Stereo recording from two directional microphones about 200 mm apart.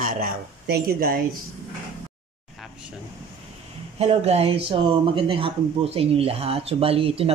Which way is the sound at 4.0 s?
30° right (ahead or behind).